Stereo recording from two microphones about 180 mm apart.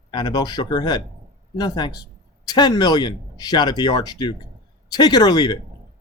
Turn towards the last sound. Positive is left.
turn(degrees=25)  # may be behind; listen again after turning